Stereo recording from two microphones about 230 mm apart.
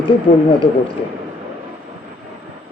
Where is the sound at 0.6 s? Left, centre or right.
Left.